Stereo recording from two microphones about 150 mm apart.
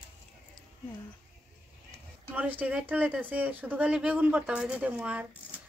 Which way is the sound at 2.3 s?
10° right (ahead or behind).